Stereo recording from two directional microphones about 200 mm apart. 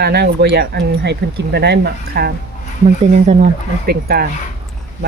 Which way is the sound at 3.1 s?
35° right (ahead or behind).